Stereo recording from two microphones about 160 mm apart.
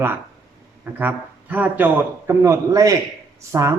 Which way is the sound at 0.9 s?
10° right (ahead or behind).